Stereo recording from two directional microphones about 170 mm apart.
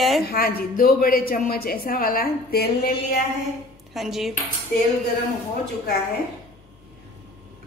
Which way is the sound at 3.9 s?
Centre (ahead or behind).